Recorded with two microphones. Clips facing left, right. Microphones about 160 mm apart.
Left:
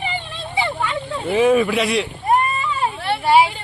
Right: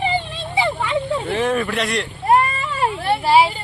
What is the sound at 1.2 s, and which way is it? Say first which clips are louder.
Speech: left 5 dB; 5° left (ahead or behind).